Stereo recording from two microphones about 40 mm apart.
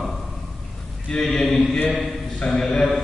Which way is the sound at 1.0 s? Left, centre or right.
Centre.